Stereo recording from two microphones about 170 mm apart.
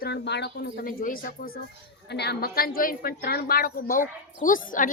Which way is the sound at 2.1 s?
75° left (ahead or behind).